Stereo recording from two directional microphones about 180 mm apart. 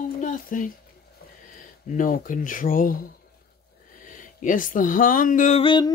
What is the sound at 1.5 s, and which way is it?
Speech, 45° left (ahead or behind).